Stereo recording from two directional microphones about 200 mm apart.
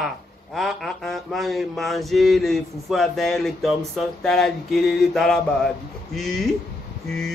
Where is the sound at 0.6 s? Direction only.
Centre (ahead or behind).